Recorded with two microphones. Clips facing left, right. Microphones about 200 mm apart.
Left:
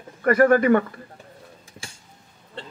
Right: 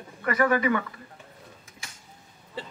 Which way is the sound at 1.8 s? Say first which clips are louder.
Left 5 dB; 30° left (ahead or behind).